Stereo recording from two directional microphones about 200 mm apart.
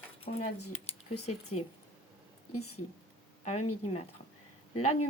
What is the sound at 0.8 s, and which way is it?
Speech, 30° left (ahead or behind).